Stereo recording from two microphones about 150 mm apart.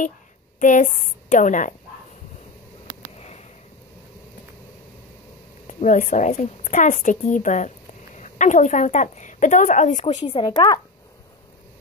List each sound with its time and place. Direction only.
0.6 s a woman's voice: 55° left (ahead or behind)
3.2 s sniff: 50° left (ahead or behind)
5.7 s a woman's voice: 55° left (ahead or behind)
10.2 s speech: 30° left (ahead or behind)